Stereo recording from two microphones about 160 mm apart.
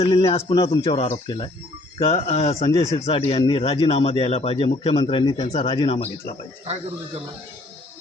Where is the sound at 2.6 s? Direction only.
20° left (ahead or behind).